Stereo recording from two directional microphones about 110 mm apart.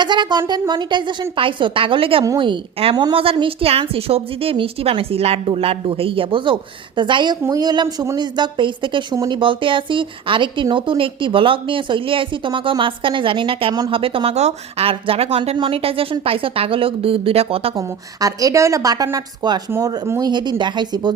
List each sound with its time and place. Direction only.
0.0 s a woman's voice: 45° right (ahead or behind); by 17.7 s 60° right (ahead or behind)
17.7 s a woman's voice: 35° right (ahead or behind)